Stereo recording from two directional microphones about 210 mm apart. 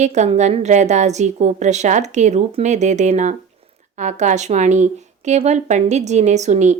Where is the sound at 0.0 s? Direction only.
35° right (ahead or behind).